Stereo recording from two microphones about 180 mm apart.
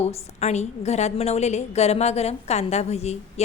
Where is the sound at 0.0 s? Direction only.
35° left (ahead or behind).